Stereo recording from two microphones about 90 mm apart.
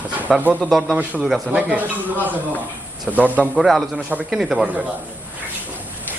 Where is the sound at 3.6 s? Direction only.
Centre (ahead or behind).